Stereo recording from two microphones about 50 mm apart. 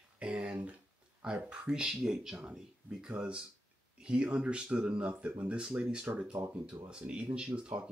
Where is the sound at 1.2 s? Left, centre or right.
Centre.